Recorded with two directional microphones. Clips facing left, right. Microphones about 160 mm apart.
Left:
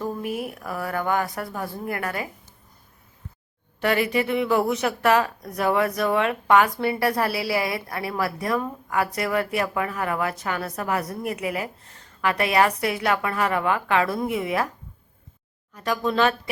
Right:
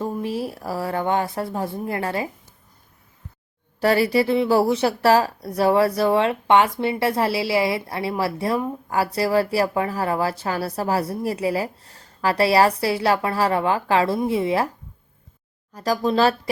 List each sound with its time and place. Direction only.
0.0 s speech: 30° right (ahead or behind)
3.8 s speech: 35° right (ahead or behind)
15.7 s speech: 35° right (ahead or behind)